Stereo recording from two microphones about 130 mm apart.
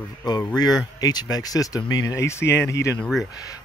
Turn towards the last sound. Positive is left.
turn(degrees=25)  # may be behind; listen again after turning